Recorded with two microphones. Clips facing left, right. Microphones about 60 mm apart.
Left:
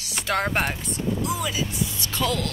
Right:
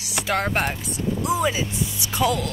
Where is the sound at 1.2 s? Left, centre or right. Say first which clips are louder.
Right 4 dB; right.